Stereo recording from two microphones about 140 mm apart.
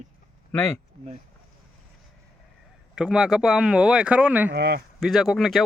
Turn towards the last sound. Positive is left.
turn(degrees=0)  # may be behind; listen again after turning